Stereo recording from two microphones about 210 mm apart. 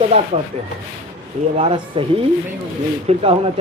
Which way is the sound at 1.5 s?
25° right (ahead or behind).